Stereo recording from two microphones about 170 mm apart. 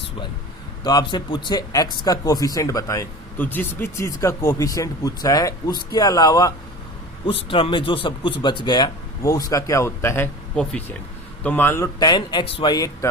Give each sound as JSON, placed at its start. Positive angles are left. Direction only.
{"t": 0.9, "sound": "speech", "side_deg": 25}
{"t": 10.5, "sound": "speech", "side_deg": 5}